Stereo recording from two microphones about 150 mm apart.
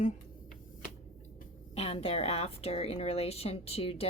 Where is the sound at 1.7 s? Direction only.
40° left (ahead or behind).